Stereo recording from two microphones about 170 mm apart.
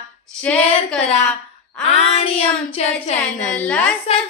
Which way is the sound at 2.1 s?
35° left (ahead or behind).